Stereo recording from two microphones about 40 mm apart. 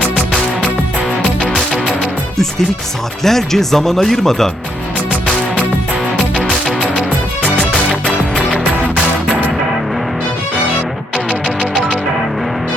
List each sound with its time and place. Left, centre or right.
1.4 s music: centre
3.2 s speech: centre
6.1 s music: centre
11.6 s music: centre